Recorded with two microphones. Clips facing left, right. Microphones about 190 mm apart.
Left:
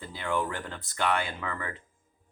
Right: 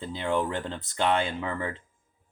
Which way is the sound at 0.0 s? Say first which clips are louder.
Right 3 dB; 20° right (ahead or behind).